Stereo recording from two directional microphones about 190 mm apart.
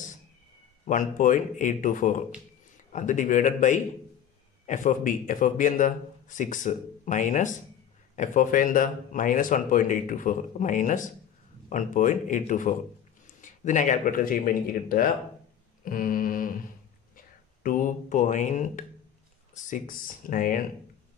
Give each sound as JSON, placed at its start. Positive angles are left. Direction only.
{"t": 0.8, "sound": "speech", "side_deg": 45}
{"t": 2.9, "sound": "mantra", "side_deg": 40}
{"t": 4.6, "sound": "speech", "side_deg": 45}
{"t": 17.6, "sound": "mantra", "side_deg": 45}
{"t": 19.5, "sound": "speech", "side_deg": 45}